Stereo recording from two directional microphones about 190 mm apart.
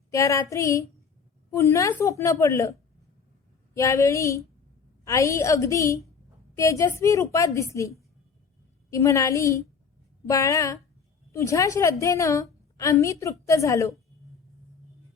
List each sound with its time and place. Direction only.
0.1 s a woman's voice: 15° left (ahead or behind)
3.8 s a woman's voice: 15° left (ahead or behind)